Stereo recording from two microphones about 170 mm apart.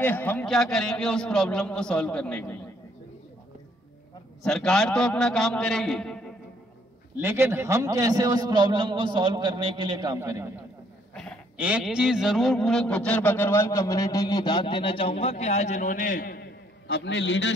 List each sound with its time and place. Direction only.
0.0 s a man's voice: 10° left (ahead or behind)
4.4 s a man's voice: 5° left (ahead or behind)
7.2 s a man's voice: 15° right (ahead or behind)
11.5 s a man's voice: 10° right (ahead or behind); by 17.6 s 90° left